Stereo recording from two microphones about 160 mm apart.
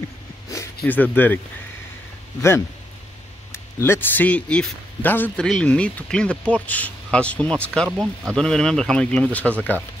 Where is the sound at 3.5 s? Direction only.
15° left (ahead or behind).